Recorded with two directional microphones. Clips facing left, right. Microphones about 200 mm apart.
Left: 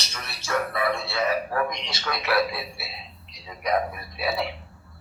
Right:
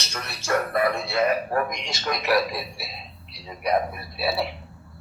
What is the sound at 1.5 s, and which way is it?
A man's voice, 45° right (ahead or behind).